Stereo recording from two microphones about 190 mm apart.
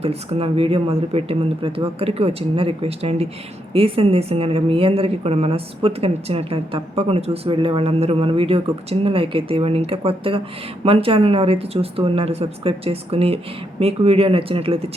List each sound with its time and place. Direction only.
0.0 s a woman's voice: 30° right (ahead or behind)